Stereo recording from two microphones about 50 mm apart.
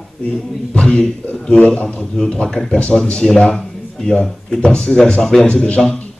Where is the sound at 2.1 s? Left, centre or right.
Centre.